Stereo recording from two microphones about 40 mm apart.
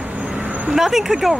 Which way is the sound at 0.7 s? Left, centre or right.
Centre.